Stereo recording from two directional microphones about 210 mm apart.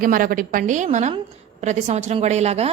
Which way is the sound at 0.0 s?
40° right (ahead or behind).